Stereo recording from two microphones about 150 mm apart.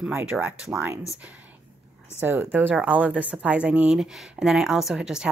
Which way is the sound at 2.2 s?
15° right (ahead or behind).